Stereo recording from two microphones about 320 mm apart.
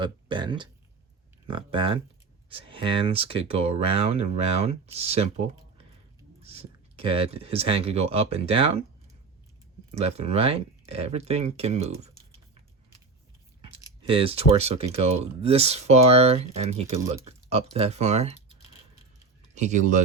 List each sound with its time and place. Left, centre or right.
0.0 s speech: centre
9.9 s speech: centre
13.6 s speech: centre
19.5 s speech: right